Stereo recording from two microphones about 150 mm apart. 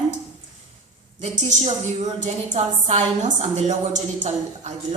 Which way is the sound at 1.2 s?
50° right (ahead or behind).